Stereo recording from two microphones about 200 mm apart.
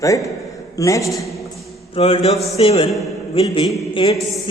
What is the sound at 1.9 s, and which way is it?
A woman's voice, 30° left (ahead or behind).